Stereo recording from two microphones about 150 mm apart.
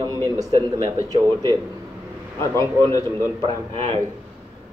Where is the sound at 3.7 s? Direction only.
40° right (ahead or behind).